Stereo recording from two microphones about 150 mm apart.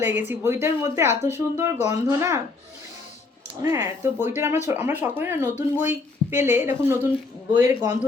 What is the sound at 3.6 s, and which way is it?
Speech, 20° right (ahead or behind).